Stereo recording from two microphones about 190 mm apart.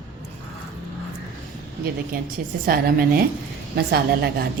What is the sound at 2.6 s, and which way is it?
A woman's voice, 50° right (ahead or behind).